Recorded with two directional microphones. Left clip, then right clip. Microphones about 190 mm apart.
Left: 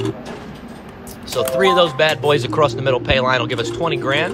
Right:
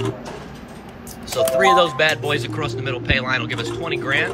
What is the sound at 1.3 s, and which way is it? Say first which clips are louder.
Speech: right 1 dB; 5° left (ahead or behind).